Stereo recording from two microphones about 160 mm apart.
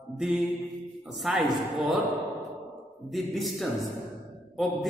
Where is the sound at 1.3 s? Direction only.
5° right (ahead or behind).